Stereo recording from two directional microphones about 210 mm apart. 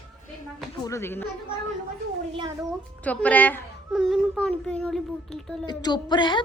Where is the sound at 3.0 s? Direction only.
10° left (ahead or behind).